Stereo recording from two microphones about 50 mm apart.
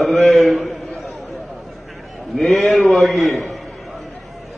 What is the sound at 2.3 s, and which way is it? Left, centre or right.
A man's voice, centre.